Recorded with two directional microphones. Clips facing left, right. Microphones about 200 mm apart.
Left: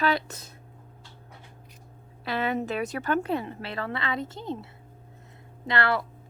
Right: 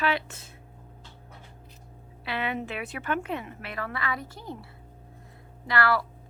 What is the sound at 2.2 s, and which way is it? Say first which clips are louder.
A woman's voice: left 4 dB; 40° left (ahead or behind).